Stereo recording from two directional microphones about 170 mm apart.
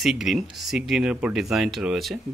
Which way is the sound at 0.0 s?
Centre (ahead or behind).